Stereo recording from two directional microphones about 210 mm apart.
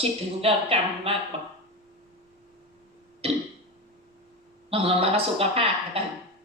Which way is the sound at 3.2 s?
30° right (ahead or behind).